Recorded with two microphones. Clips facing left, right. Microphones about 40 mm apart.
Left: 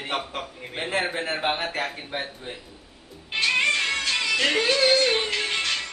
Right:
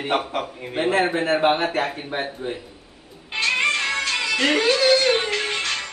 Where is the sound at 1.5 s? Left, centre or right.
Right.